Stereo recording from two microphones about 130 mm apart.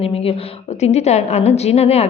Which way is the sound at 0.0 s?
50° left (ahead or behind).